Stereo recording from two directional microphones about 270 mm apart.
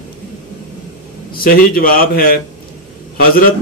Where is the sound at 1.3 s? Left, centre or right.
Left.